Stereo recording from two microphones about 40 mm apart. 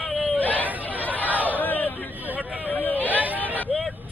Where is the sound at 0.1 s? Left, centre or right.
Centre.